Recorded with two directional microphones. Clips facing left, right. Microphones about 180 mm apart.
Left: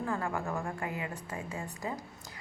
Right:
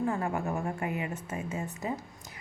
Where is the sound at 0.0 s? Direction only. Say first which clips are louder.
Right 3 dB; 20° right (ahead or behind).